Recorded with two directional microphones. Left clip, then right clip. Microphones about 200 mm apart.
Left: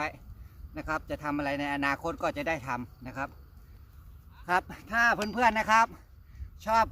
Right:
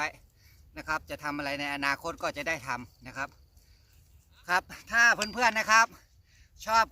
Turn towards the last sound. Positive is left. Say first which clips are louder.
# even
turn(degrees=10)  # may be behind; listen again after turning